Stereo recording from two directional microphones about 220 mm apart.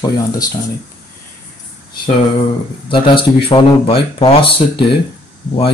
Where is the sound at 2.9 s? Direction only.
25° left (ahead or behind).